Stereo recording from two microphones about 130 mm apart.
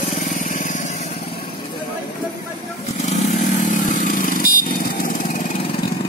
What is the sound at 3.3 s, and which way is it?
Vehicle, 75° left (ahead or behind).